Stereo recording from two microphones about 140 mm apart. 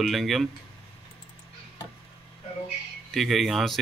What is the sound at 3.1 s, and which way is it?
Speech, centre (ahead or behind).